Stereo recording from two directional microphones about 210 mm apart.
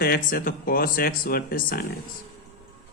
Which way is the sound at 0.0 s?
45° left (ahead or behind).